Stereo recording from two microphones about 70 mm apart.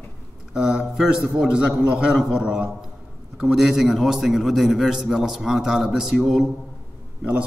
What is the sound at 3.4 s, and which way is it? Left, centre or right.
A man's voice, centre.